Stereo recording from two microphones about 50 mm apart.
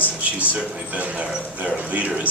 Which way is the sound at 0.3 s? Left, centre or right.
Right.